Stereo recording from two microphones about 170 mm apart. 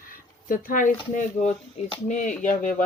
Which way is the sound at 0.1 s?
55° left (ahead or behind).